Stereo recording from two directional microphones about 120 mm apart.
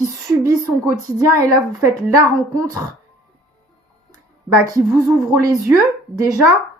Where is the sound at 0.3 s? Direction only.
30° right (ahead or behind).